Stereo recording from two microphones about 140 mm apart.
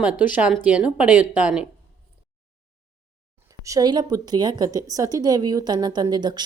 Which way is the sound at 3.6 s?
25° right (ahead or behind).